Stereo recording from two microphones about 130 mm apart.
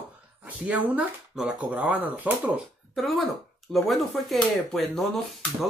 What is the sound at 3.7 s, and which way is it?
Speech, centre (ahead or behind).